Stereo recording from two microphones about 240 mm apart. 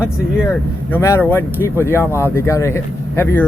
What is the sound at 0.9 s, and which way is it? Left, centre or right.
Speech, centre.